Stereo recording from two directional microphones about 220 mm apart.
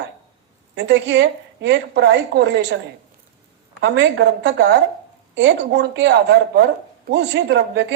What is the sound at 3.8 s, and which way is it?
A woman's voice, 55° right (ahead or behind).